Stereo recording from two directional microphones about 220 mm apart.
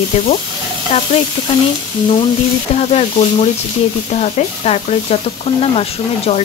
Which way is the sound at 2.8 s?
30° left (ahead or behind).